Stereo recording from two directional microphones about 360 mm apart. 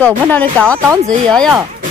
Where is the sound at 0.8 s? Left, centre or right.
Centre.